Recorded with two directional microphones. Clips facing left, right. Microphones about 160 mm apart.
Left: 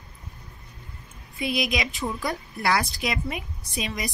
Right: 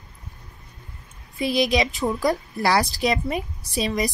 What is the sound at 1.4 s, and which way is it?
A woman's voice, 30° right (ahead or behind).